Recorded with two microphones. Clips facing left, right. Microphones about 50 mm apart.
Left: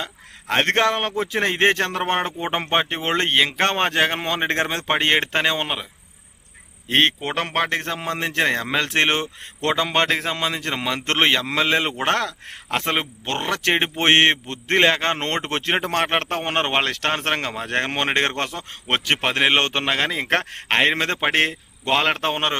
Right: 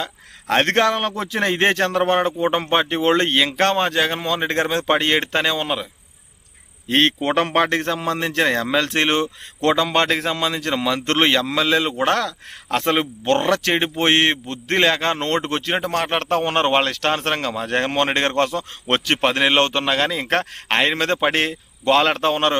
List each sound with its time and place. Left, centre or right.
0.0 s speech: centre
2.0 s speech: left
3.7 s a man's voice: left; by 7.1 s centre
7.2 s speech: centre
7.8 s a man's voice: centre
12.7 s a man's voice: centre; by 16.1 s left
16.1 s speech: left
18.9 s speech: centre